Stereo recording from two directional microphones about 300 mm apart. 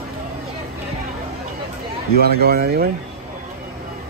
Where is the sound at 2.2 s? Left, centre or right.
Right.